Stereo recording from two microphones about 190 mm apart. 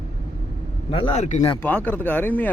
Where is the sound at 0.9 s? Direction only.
25° left (ahead or behind).